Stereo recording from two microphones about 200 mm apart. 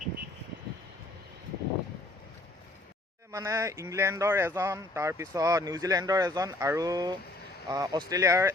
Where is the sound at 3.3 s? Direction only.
15° right (ahead or behind).